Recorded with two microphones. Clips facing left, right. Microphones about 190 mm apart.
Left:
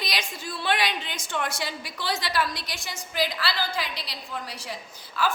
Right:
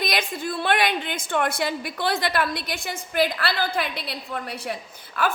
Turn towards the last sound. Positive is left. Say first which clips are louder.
# right 2 dB
turn(degrees=-60)  # may be behind; listen again after turning